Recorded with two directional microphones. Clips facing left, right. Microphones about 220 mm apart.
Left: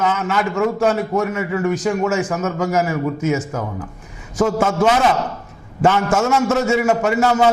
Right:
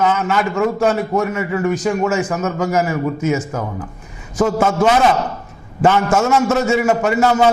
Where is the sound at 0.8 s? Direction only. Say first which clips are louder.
Right 1 dB; 10° right (ahead or behind).